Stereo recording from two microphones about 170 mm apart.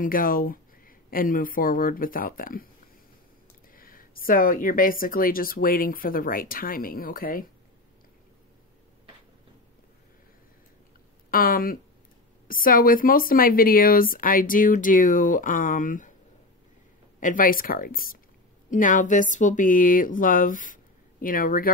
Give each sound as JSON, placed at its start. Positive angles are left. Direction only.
{"t": 0.0, "sound": "speech", "side_deg": 55}
{"t": 3.7, "sound": "speech", "side_deg": 55}
{"t": 11.2, "sound": "speech", "side_deg": 55}
{"t": 17.2, "sound": "speech", "side_deg": 50}